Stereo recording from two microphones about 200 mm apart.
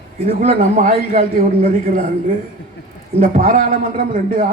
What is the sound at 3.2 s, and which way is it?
Speech, 40° right (ahead or behind).